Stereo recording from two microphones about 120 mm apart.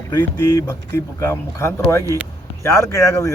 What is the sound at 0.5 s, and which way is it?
Speech, 20° left (ahead or behind).